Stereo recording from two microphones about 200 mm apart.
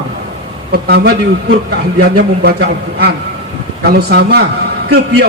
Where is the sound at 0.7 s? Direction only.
55° right (ahead or behind).